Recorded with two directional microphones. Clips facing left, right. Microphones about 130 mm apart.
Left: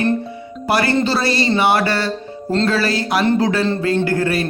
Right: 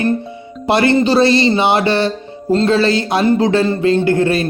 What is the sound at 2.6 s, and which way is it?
Speech, 25° right (ahead or behind).